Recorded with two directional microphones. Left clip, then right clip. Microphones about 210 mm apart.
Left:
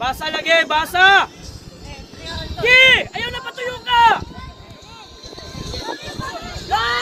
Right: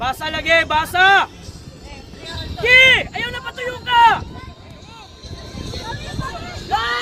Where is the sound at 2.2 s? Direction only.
30° left (ahead or behind).